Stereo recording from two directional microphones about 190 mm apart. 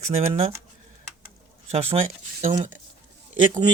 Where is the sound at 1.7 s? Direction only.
35° right (ahead or behind).